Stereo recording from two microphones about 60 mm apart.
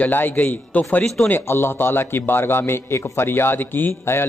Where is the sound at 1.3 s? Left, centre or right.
Left.